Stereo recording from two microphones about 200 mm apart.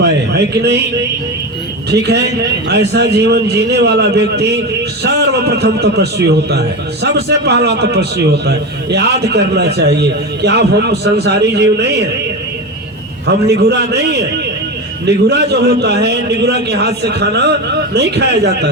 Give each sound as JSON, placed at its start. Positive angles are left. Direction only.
{"t": 0.0, "sound": "a man's voice", "side_deg": -55}
{"t": 1.9, "sound": "a man's voice", "side_deg": -55}
{"t": 13.2, "sound": "a man's voice", "side_deg": -55}